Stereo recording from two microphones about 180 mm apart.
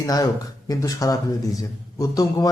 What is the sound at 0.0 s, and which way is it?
Speech, 20° left (ahead or behind).